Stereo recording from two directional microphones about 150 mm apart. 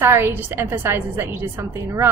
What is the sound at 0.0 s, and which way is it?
A woman's voice, 15° right (ahead or behind).